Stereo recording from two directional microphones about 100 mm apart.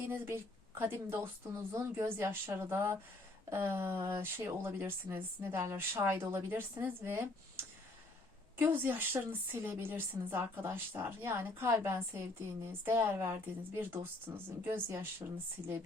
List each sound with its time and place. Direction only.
0.1 s a woman's voice: 25° right (ahead or behind)